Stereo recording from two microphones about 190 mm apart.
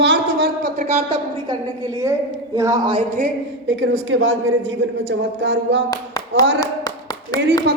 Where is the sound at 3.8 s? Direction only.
90° right; by 5.8 s 65° right (ahead or behind).